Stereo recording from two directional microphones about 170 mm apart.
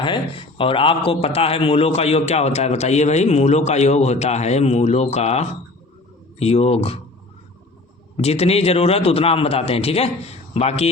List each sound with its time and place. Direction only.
0.0 s a man's voice: 30° left (ahead or behind)
8.1 s a man's voice: 35° left (ahead or behind)